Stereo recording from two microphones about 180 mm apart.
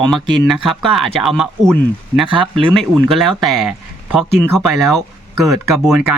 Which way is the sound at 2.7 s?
Centre (ahead or behind).